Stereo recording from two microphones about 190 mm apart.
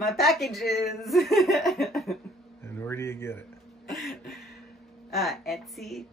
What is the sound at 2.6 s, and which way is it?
Speech, 10° left (ahead or behind).